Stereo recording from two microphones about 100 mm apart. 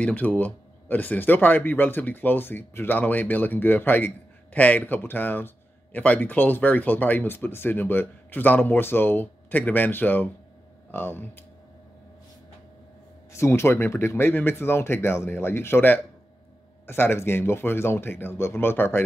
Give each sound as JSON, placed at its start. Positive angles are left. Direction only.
{"t": 0.0, "sound": "speech", "side_deg": 15}
{"t": 13.3, "sound": "speech", "side_deg": 25}